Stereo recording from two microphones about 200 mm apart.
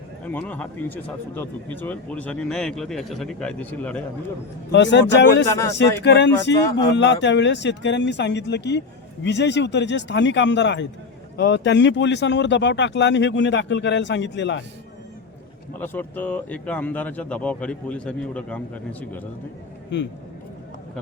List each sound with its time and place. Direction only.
0.3 s speech: 10° left (ahead or behind)
4.7 s speech: 60° left (ahead or behind)
5.5 s speech: 15° left (ahead or behind)
6.0 s speech: 60° left (ahead or behind)
6.6 s speech: 15° left (ahead or behind)
6.9 s speech: 60° left (ahead or behind)
15.8 s speech: 10° left (ahead or behind)